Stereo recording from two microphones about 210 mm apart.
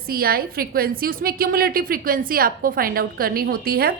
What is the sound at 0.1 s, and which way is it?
A woman's voice, 45° right (ahead or behind).